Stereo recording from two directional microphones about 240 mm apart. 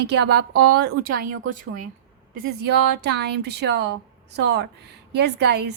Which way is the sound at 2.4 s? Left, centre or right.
Right.